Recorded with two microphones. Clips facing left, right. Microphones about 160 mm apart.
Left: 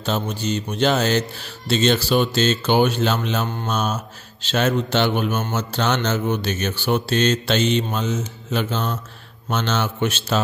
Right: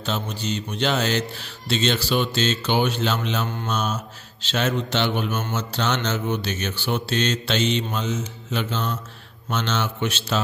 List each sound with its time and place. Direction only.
0.0 s mantra: 45° left (ahead or behind)